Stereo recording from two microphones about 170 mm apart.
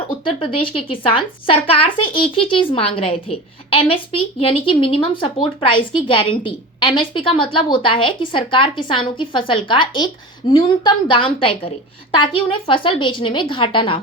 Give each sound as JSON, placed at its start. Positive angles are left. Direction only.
{"t": 0.3, "sound": "a woman's voice", "side_deg": 30}